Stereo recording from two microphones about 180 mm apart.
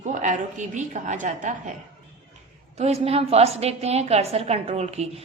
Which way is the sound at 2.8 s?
35° right (ahead or behind).